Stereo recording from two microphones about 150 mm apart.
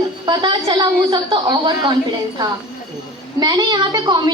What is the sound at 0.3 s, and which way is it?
A woman's voice, 30° right (ahead or behind).